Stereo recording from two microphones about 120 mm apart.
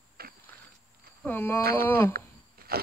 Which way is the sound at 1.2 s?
15° left (ahead or behind).